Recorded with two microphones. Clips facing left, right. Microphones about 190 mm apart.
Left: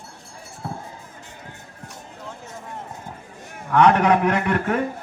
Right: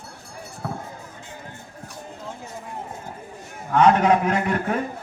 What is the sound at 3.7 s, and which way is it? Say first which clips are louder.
A man's voice: even; 65° left (ahead or behind).